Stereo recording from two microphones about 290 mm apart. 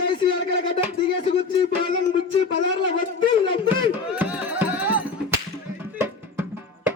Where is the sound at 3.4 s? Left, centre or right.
Centre.